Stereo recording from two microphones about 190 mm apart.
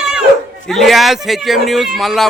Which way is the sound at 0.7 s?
Centre (ahead or behind).